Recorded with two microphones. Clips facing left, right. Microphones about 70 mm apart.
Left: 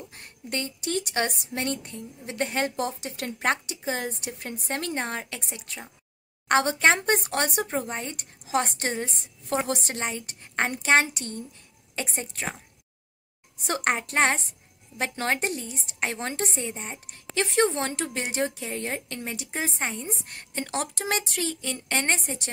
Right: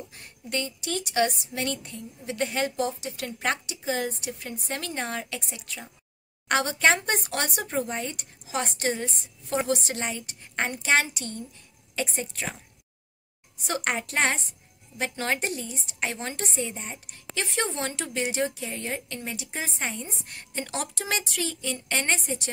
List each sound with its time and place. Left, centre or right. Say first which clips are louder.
0.1 s a woman's voice: right 1 dB; left
7.6 s a woman's voice: right 1 dB; left
9.7 s a woman's voice: right 1 dB; left
13.7 s a woman's voice: left 2 dB; left
16.6 s a woman's voice: left 1 dB; left
17.0 s a woman's voice: left 6 dB; left